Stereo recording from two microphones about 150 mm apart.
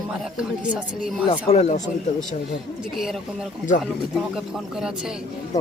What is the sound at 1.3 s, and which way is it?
Speech, 45° left (ahead or behind).